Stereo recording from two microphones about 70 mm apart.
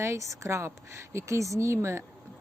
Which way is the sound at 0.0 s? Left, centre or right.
Right.